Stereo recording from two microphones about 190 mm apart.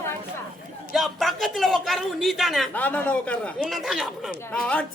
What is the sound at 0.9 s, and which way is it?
Speech, centre (ahead or behind).